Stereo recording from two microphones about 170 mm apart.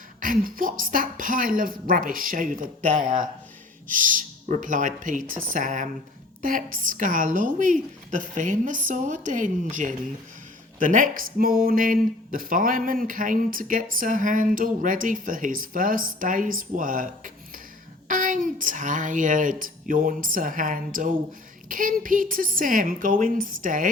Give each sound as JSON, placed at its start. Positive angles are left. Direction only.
{"t": 0.2, "sound": "speech", "side_deg": -55}